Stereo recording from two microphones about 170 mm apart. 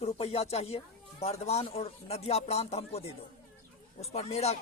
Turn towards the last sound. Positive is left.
turn(degrees=40)  # may be behind; listen again after turning